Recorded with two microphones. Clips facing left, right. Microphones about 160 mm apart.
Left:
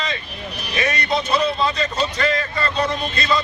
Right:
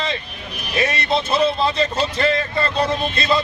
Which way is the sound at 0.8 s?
30° right (ahead or behind).